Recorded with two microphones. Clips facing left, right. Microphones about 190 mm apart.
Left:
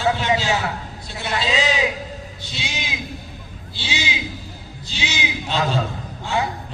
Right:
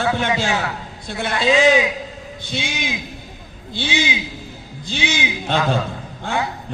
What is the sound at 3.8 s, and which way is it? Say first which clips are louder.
A man's voice: right 5 dB; 55° right (ahead or behind).